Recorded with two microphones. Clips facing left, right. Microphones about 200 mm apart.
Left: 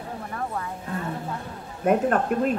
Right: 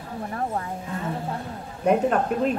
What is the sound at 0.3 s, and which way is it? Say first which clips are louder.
Speech: right 3 dB; 35° right (ahead or behind).